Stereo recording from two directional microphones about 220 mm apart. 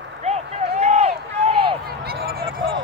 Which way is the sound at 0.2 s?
30° right (ahead or behind).